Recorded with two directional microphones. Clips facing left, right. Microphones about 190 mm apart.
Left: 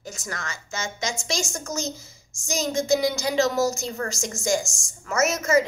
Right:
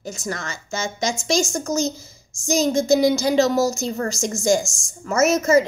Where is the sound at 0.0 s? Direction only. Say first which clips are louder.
Right 6 dB; 30° right (ahead or behind).